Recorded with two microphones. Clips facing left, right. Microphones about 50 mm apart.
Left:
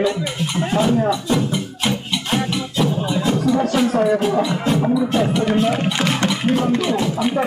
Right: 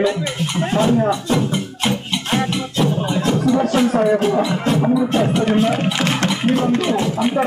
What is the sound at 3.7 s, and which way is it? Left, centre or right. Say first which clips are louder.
Speech: right 1 dB; centre.